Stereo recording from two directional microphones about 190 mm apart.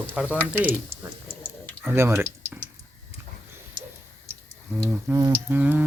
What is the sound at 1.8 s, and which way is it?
Speech, 15° right (ahead or behind).